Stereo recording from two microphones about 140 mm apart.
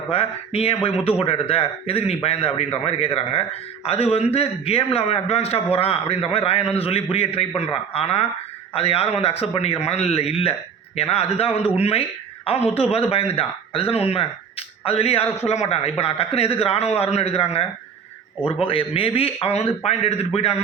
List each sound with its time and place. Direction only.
0.1 s a man's voice: 45° left (ahead or behind)